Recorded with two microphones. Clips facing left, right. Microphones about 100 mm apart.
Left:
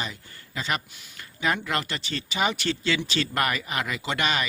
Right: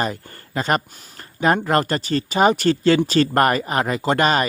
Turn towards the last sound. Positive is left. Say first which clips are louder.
# right 9 dB
turn(degrees=-45)  # may be behind; listen again after turning